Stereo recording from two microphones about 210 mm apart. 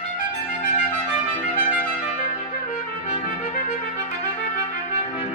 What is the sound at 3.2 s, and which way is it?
Trumpet, 35° left (ahead or behind).